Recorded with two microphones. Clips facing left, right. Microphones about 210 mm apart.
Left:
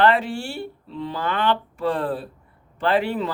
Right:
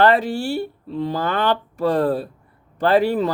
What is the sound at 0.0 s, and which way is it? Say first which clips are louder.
Speech: right 3 dB; 40° right (ahead or behind).